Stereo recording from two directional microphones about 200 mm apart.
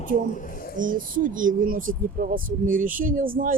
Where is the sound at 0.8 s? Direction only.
40° right (ahead or behind).